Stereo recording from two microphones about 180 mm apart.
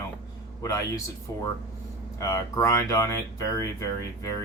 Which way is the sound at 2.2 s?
15° left (ahead or behind).